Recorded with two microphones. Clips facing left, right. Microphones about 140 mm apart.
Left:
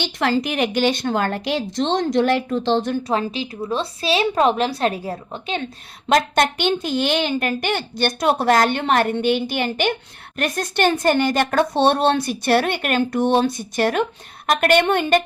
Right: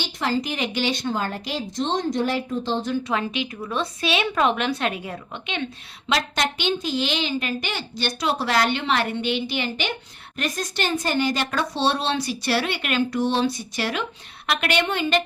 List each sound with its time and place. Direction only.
0.2 s speech: 65° left (ahead or behind)
3.1 s a woman's voice: 35° left (ahead or behind)
6.1 s a woman's voice: 50° left (ahead or behind)